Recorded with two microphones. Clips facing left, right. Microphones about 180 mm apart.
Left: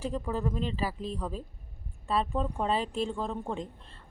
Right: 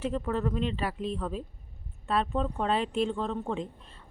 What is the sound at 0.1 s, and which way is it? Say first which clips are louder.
Speech: right 2 dB; 5° left (ahead or behind).